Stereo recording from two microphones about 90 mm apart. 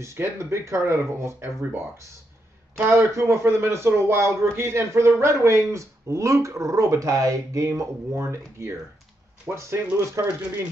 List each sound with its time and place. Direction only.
0.0 s a man's voice: 30° right (ahead or behind)